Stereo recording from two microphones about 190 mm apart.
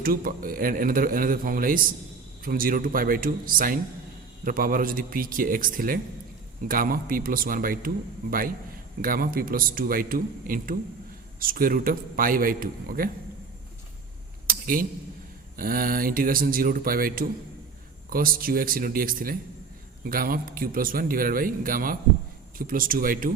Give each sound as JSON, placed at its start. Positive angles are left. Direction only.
{"t": 0.0, "sound": "a man's voice", "side_deg": -50}
{"t": 14.4, "sound": "a sound", "side_deg": -50}
{"t": 15.5, "sound": "a man's voice", "side_deg": -50}